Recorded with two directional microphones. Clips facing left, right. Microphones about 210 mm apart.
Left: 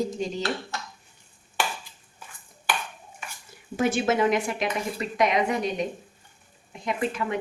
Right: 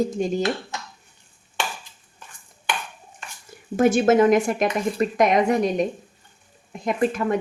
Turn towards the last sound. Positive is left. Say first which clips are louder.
# right 6 dB
turn(degrees=-45)  # may be behind; listen again after turning